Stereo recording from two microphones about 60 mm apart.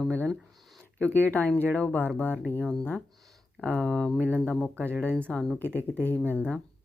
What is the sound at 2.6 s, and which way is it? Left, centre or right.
Speech, centre.